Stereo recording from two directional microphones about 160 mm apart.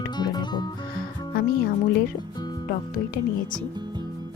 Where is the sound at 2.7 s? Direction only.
60° left (ahead or behind).